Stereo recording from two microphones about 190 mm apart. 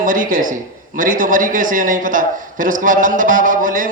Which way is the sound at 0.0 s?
45° right (ahead or behind).